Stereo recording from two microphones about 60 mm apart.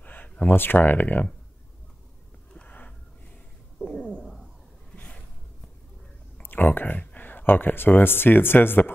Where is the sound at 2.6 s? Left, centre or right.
Left.